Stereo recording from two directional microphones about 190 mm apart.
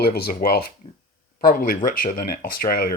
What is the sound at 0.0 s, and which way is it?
Speech, 55° left (ahead or behind).